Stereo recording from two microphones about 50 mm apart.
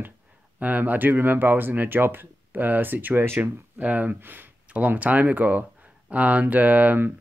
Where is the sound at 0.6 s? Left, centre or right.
Right.